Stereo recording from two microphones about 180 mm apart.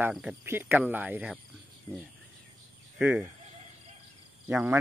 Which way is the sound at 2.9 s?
5° right (ahead or behind).